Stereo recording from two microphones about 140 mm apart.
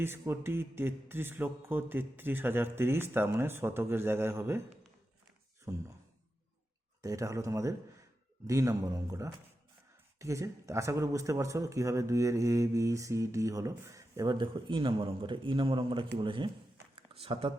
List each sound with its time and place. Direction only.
0.0 s a sound: 15° right (ahead or behind)
5.7 s speech: 20° right (ahead or behind)
7.0 s speech: 25° right (ahead or behind); by 17.5 s 40° right (ahead or behind)